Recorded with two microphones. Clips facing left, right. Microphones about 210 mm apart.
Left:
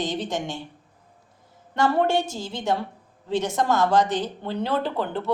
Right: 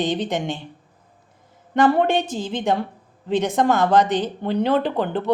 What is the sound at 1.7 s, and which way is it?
A woman's voice, 55° right (ahead or behind).